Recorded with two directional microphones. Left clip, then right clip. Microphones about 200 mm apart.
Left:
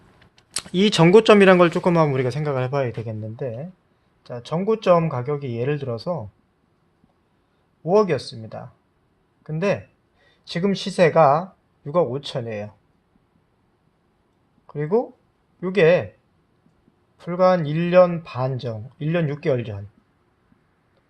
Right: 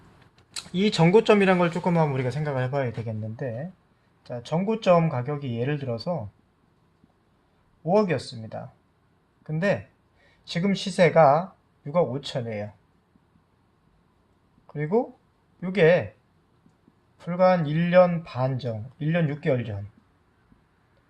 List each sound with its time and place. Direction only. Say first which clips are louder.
0.3 s a man's voice: left 7 dB; 55° left (ahead or behind); by 6.1 s 35° left (ahead or behind)
7.9 s a man's voice: left 4 dB; 35° left (ahead or behind)
14.7 s a man's voice: left 3 dB; 30° left (ahead or behind)
17.2 s a man's voice: left 3 dB; 30° left (ahead or behind)